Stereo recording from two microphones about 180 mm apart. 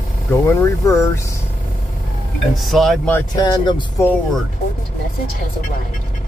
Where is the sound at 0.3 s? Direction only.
15° left (ahead or behind).